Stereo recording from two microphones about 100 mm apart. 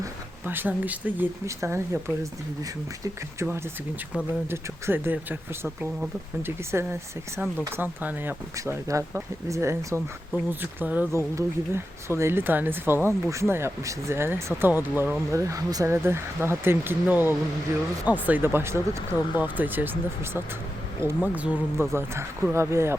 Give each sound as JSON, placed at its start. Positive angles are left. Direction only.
{"t": 0.4, "sound": "speech", "side_deg": -20}
{"t": 1.5, "sound": "speech", "side_deg": -30}
{"t": 4.4, "sound": "speech", "side_deg": -25}
{"t": 8.5, "sound": "speech", "side_deg": -30}
{"t": 11.1, "sound": "speech", "side_deg": -25}
{"t": 15.3, "sound": "speech", "side_deg": -30}
{"t": 21.8, "sound": "speech", "side_deg": -25}